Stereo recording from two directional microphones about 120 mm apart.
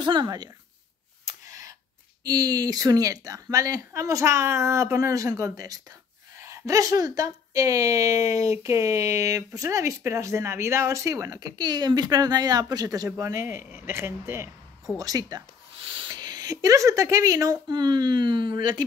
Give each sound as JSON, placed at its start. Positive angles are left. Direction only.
{"t": 0.0, "sound": "speech", "side_deg": -40}
{"t": 1.2, "sound": "a sound", "side_deg": -25}
{"t": 2.2, "sound": "a woman's voice", "side_deg": -30}
{"t": 15.0, "sound": "speech", "side_deg": -30}
{"t": 15.8, "sound": "a woman's voice", "side_deg": -45}